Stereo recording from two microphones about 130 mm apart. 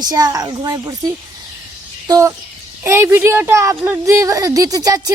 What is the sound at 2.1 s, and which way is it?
Speech, 25° right (ahead or behind).